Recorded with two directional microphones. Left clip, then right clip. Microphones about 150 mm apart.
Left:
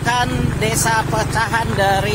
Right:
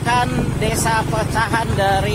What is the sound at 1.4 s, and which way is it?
Speech, centre (ahead or behind).